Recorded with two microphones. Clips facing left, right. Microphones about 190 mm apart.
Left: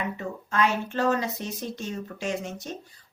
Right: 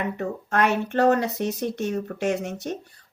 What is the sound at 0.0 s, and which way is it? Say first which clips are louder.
Speech: right 4 dB; 60° right (ahead or behind).